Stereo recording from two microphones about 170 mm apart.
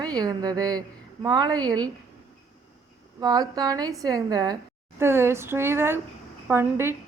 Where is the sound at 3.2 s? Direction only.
20° right (ahead or behind).